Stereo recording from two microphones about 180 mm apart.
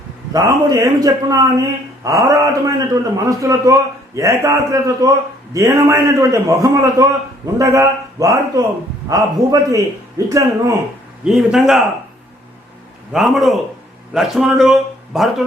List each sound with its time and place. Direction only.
0.3 s a man's voice: 20° right (ahead or behind)
11.3 s a man's voice: centre (ahead or behind)
13.1 s a man's voice: centre (ahead or behind)